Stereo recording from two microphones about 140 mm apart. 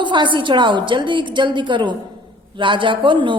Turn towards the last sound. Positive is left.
turn(degrees=-35)  # may be behind; listen again after turning